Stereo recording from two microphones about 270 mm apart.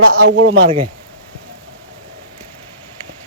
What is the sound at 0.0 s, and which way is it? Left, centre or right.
Speech, right.